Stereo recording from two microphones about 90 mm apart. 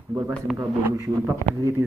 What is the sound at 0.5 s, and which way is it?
A man's voice, 35° right (ahead or behind).